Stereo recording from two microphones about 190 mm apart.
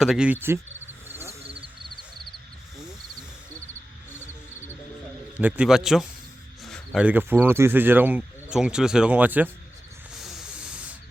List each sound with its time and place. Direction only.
0.0 s speech: 5° right (ahead or behind)
1.0 s frog: 10° right (ahead or behind)
1.3 s frog: 30° right (ahead or behind)
4.1 s frog: 10° left (ahead or behind)
5.4 s a man's voice: 5° right (ahead or behind)
10.2 s spray: centre (ahead or behind)